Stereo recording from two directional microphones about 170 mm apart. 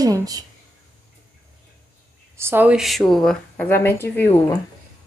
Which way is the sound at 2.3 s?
15° right (ahead or behind).